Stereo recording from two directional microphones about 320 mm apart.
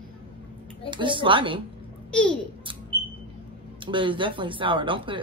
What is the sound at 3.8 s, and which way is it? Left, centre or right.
Speech, centre.